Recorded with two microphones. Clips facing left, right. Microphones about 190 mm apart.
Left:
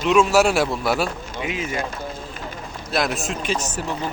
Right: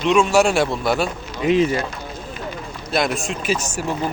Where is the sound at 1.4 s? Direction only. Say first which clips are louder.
Right 12 dB; 40° right (ahead or behind).